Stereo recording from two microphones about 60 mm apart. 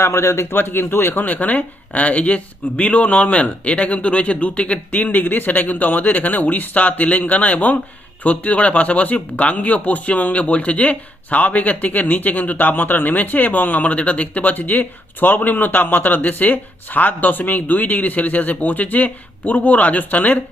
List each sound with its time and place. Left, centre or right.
0.0 s speech: left